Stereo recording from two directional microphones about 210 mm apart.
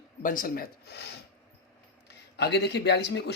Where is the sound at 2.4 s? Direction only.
55° left (ahead or behind).